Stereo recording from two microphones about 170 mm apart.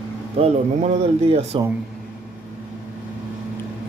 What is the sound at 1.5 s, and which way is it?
Speech, 30° right (ahead or behind).